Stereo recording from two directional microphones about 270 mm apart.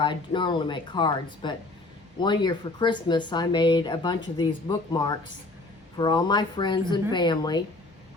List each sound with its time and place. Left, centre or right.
0.0 s speech: centre